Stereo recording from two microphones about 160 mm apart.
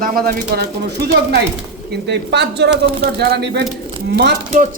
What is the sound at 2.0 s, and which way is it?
Speech, 90° right.